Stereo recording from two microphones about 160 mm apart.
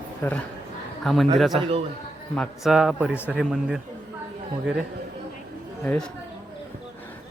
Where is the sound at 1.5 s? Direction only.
35° right (ahead or behind).